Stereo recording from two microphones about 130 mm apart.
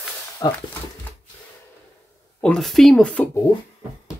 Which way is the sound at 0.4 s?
35° left (ahead or behind).